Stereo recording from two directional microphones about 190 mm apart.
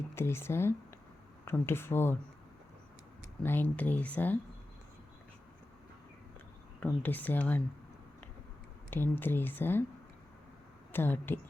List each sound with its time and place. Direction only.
0.1 s speech: 15° left (ahead or behind)
3.4 s speech: 10° left (ahead or behind)
6.7 s speech: 10° left (ahead or behind)
8.9 s speech: 10° left (ahead or behind)
10.9 s speech: 10° left (ahead or behind)